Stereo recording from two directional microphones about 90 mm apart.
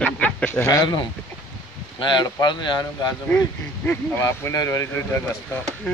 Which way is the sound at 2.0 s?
60° left (ahead or behind).